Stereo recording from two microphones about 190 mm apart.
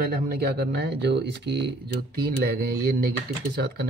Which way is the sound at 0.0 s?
55° right (ahead or behind).